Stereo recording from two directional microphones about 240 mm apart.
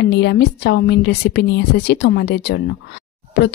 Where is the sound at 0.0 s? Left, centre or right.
Left.